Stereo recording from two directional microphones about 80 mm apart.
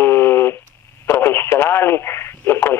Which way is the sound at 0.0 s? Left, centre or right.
Left.